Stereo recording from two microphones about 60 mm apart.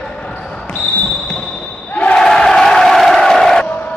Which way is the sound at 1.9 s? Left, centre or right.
Left.